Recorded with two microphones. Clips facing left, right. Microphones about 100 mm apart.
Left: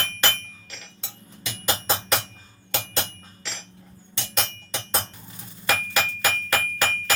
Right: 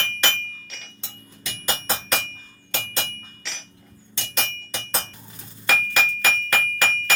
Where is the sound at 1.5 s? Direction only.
15° left (ahead or behind).